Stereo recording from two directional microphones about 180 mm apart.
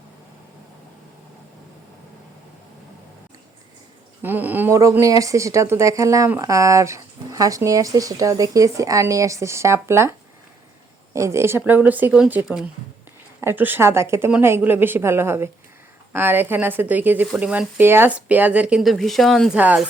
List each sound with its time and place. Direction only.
4.2 s speech: 10° right (ahead or behind)